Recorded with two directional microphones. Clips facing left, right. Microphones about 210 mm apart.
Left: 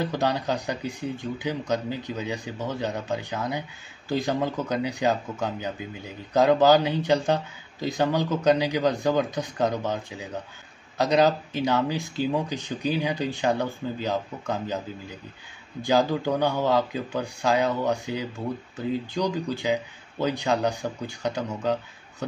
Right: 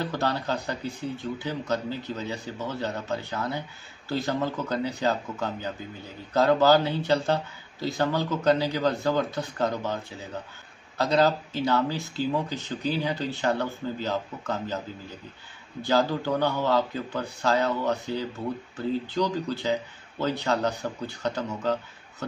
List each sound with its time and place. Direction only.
0.0 s speech: 15° left (ahead or behind)